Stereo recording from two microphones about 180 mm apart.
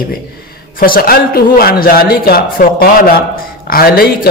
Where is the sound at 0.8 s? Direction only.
55° left (ahead or behind).